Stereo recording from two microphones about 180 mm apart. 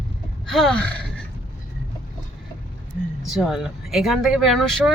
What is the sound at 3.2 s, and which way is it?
Speech, centre (ahead or behind).